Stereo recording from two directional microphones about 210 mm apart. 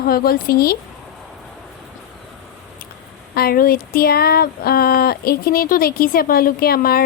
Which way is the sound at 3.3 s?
45° left (ahead or behind).